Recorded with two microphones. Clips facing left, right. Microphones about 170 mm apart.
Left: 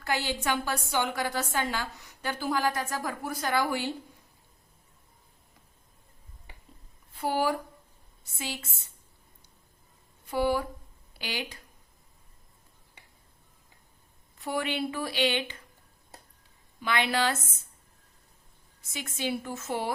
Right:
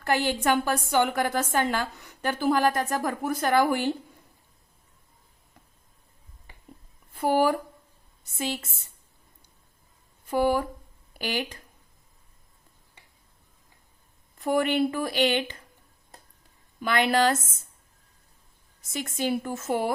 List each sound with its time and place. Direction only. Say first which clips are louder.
0.3 s a woman's voice: right 6 dB; 50° right (ahead or behind)
7.2 s a woman's voice: right 5 dB; 50° right (ahead or behind)
10.2 s a woman's voice: right 3 dB; 45° right (ahead or behind)
14.3 s a woman's voice: right 7 dB; 45° right (ahead or behind)
16.8 s a woman's voice: right 5 dB; 45° right (ahead or behind)
18.8 s a woman's voice: right 5 dB; 45° right (ahead or behind)